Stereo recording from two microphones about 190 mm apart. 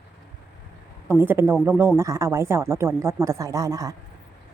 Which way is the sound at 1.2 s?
10° right (ahead or behind).